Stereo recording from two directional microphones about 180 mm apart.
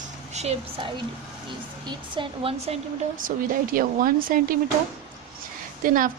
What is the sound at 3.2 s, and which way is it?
Speech, 50° right (ahead or behind).